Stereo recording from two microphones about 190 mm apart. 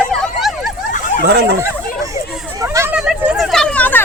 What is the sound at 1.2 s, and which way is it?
Speech, 60° right (ahead or behind).